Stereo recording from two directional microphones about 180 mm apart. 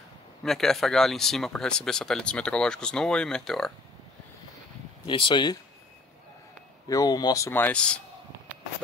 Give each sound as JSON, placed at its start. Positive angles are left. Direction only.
{"t": 0.4, "sound": "speech", "side_deg": 0}
{"t": 5.0, "sound": "speech", "side_deg": 25}
{"t": 6.9, "sound": "speech", "side_deg": 20}